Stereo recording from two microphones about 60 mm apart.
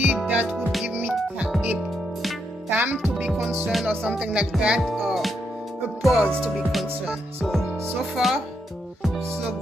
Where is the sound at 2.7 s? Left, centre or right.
Right.